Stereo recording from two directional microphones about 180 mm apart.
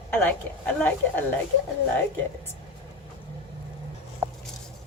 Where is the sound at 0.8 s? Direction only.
10° left (ahead or behind).